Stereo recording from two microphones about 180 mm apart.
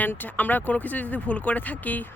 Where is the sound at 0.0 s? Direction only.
10° left (ahead or behind).